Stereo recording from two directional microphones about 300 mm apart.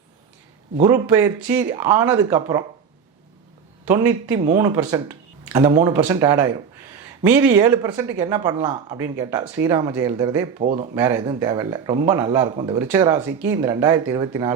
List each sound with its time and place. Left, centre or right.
0.8 s speech: centre
4.4 s speech: centre
10.6 s speech: right